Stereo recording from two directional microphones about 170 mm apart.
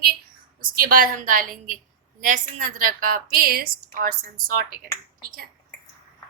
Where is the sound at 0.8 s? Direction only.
55° right (ahead or behind).